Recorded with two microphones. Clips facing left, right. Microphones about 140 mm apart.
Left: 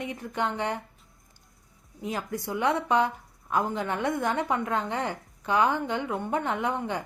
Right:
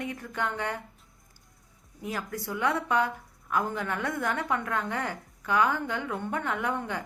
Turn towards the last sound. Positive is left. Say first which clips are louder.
# left 2 dB
turn(degrees=20)  # may be behind; listen again after turning